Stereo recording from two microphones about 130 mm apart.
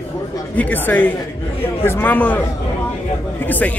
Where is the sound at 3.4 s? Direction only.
10° left (ahead or behind).